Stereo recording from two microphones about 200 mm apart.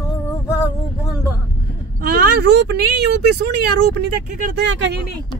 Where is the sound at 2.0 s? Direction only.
50° right (ahead or behind).